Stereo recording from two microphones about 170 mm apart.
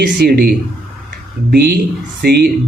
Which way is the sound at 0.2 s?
65° right (ahead or behind).